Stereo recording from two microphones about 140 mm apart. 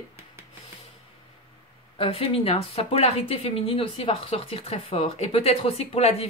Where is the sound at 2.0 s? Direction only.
45° left (ahead or behind).